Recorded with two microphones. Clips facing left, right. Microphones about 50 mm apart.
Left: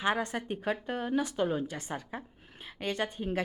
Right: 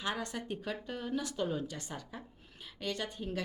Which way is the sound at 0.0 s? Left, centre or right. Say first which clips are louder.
Left 7 dB; left.